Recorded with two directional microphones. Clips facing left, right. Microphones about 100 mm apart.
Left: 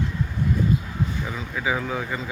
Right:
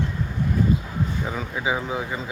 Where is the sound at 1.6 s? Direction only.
20° right (ahead or behind).